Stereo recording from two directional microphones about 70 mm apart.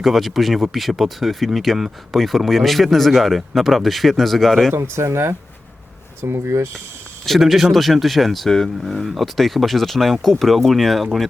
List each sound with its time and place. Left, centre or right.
0.0 s speech: centre
4.7 s speech: right
7.3 s speech: centre